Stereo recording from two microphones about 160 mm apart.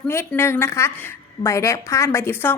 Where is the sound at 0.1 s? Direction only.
15° left (ahead or behind).